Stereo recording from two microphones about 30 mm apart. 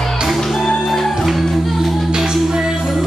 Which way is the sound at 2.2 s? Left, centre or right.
Centre.